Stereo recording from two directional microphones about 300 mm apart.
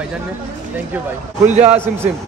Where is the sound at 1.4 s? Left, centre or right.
Right.